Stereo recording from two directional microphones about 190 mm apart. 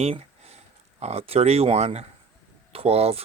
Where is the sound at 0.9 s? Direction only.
35° right (ahead or behind).